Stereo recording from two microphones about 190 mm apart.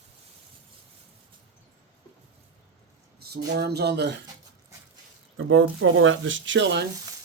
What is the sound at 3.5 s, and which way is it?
Speech, 60° right (ahead or behind).